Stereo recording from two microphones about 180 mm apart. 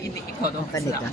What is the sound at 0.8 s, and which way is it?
Speech, 20° left (ahead or behind).